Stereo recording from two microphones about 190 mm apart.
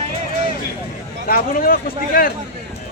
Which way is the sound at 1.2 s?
45° left (ahead or behind).